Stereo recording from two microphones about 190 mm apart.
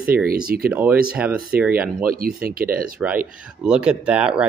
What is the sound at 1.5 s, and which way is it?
Speech, 50° right (ahead or behind).